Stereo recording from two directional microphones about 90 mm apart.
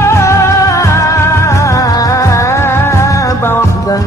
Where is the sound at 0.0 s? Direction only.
30° left (ahead or behind).